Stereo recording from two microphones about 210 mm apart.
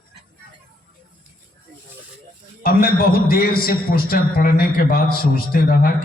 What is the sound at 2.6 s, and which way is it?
A man's voice, 45° left (ahead or behind).